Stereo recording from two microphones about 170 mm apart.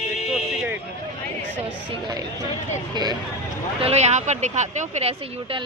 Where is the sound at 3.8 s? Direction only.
40° right (ahead or behind).